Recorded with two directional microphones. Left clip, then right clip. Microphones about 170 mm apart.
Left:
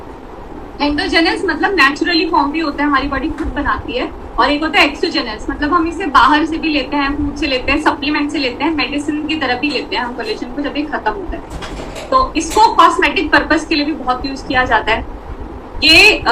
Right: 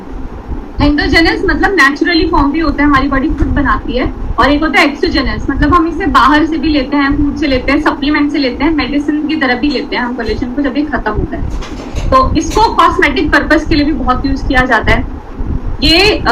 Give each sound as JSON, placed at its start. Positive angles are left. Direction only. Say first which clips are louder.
{"t": 0.8, "sound": "a woman's voice", "louder": "right 4 dB", "side_deg": 40}
{"t": 12.1, "sound": "a woman's voice", "louder": "right 3 dB", "side_deg": 35}